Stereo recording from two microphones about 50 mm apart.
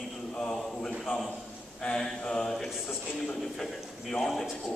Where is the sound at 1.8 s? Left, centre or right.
Centre.